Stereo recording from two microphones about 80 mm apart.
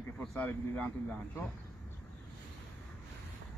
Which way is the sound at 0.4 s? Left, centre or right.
Left.